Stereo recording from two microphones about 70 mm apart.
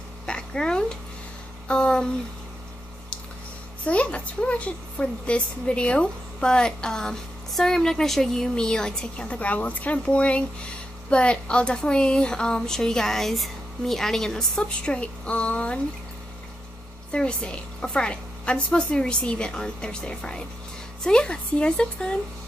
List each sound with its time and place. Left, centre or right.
0.3 s a sound: centre
1.7 s a woman's voice: centre
3.8 s a woman's voice: centre
17.1 s a woman's voice: centre